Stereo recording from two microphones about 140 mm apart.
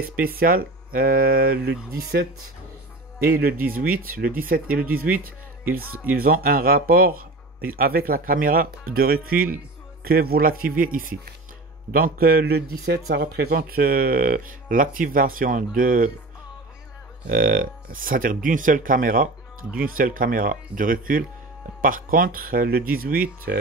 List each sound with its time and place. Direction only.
0.2 s speech: 90° right
3.3 s speech: 90° right
17.3 s speech: 90° right